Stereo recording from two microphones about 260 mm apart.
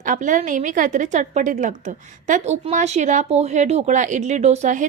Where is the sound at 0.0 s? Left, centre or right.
Right.